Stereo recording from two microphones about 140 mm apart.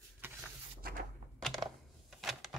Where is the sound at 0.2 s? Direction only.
15° right (ahead or behind).